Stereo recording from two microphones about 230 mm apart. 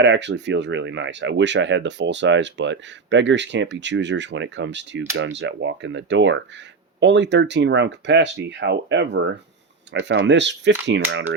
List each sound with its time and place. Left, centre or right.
0.0 s speech: right